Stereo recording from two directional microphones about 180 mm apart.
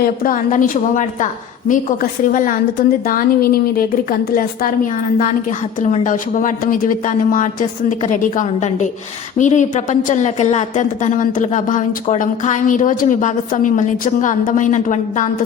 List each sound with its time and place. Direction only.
0.0 s a woman's voice: 50° left (ahead or behind)